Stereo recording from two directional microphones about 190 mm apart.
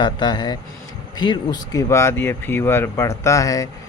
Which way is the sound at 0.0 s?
25° left (ahead or behind).